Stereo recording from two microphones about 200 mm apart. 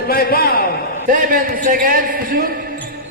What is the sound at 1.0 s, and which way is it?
A man's voice, 40° right (ahead or behind).